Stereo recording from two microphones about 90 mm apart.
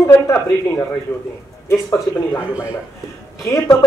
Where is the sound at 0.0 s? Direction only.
30° left (ahead or behind).